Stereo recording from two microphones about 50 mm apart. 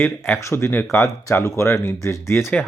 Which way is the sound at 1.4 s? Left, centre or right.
Left.